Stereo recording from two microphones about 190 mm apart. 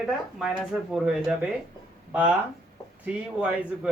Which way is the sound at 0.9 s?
5° right (ahead or behind).